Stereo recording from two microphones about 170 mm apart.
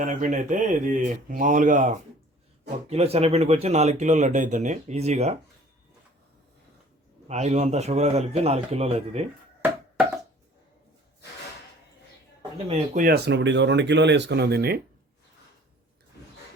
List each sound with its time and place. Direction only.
0.0 s speech: 50° right (ahead or behind)
2.9 s speech: 35° right (ahead or behind)
7.3 s speech: 40° right (ahead or behind)
12.6 s speech: 40° right (ahead or behind)
13.0 s speech: 65° right (ahead or behind)